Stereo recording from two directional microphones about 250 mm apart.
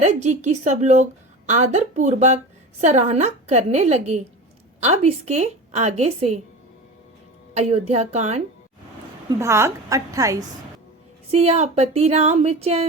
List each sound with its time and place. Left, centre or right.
0.0 s a woman's voice: right
7.5 s a woman's voice: right
9.4 s a woman's voice: centre
11.3 s a woman's voice: right